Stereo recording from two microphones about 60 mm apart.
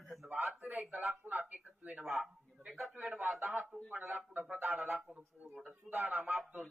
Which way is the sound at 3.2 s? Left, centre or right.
Right.